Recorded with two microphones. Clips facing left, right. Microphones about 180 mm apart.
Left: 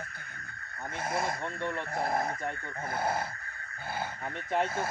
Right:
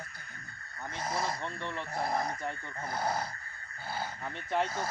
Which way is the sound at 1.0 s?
25° left (ahead or behind).